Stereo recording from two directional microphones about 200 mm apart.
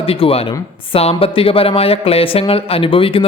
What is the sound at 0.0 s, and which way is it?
A man's voice, 30° left (ahead or behind).